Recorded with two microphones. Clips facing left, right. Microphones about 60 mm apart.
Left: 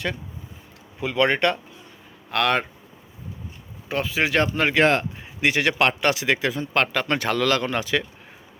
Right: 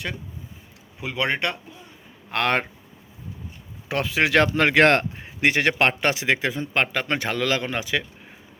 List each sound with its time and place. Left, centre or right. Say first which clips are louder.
0.9 s speech: left 4 dB; centre
2.3 s speech: left 1 dB; right
3.8 s speech: right 1 dB; right
5.1 s a sound: right 1 dB; right
5.8 s speech: left 1 dB; right